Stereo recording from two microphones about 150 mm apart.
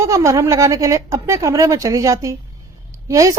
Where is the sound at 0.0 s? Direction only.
20° right (ahead or behind).